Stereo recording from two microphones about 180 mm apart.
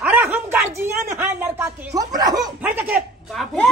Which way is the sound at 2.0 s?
20° right (ahead or behind).